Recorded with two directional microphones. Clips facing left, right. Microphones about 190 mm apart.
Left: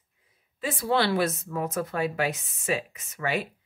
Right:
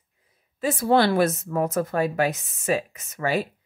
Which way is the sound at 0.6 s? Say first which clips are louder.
Right 6 dB; 45° right (ahead or behind).